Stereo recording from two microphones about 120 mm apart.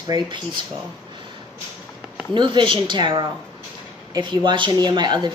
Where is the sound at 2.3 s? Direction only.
40° right (ahead or behind).